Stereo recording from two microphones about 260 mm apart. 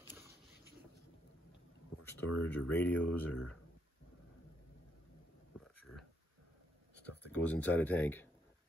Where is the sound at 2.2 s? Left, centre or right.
Left.